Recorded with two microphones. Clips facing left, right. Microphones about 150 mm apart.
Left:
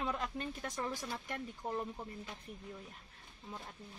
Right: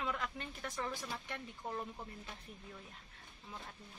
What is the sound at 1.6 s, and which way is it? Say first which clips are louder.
Speech: left 3 dB; 15° left (ahead or behind).